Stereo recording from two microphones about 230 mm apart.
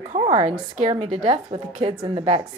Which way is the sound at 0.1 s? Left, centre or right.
Right.